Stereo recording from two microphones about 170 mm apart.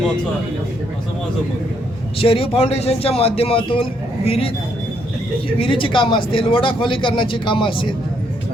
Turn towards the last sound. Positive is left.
turn(degrees=30)  # may be behind; listen again after turning